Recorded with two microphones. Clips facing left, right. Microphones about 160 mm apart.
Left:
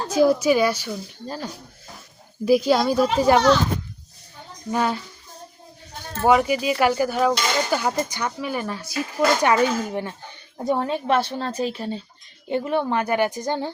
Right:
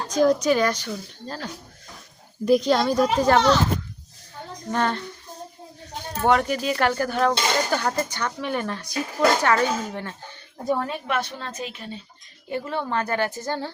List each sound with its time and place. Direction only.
0.1 s a woman's voice: 10° left (ahead or behind)
4.7 s speech: 5° left (ahead or behind)
6.2 s speech: 5° left (ahead or behind); by 12.0 s 35° left (ahead or behind)
12.5 s speech: 20° left (ahead or behind)